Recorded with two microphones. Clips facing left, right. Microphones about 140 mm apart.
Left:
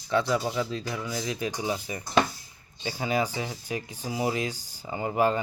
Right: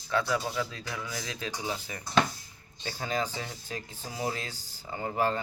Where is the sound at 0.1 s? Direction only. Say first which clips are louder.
Left 4 dB; 20° left (ahead or behind).